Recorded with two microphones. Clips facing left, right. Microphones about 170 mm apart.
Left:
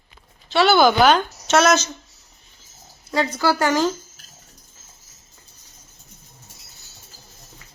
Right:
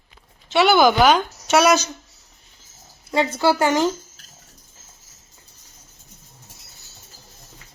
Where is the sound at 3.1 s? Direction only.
25° right (ahead or behind).